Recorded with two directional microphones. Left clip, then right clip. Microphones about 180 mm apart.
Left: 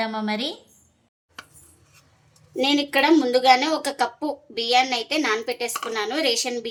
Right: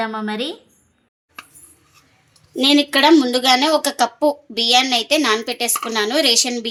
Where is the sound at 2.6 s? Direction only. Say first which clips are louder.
Right 6 dB; 40° right (ahead or behind).